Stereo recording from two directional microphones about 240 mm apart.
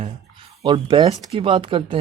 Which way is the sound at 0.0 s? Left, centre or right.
Right.